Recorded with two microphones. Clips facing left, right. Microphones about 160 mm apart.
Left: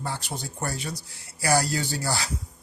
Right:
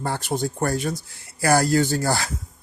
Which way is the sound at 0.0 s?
50° right (ahead or behind).